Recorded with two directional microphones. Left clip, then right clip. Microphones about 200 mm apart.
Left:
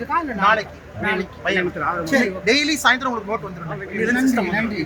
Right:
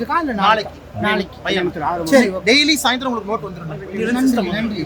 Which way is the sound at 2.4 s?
15° right (ahead or behind).